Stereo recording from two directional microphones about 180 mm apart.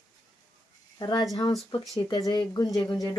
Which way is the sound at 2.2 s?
25° left (ahead or behind).